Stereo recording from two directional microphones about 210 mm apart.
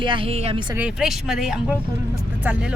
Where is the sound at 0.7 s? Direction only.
5° right (ahead or behind).